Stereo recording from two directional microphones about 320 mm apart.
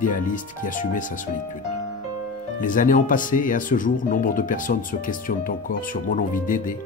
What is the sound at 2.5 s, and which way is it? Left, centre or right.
Speech, left.